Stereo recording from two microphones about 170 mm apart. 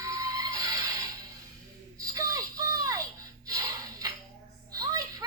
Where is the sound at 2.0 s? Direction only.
20° right (ahead or behind).